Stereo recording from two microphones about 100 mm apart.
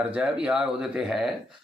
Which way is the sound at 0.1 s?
10° right (ahead or behind).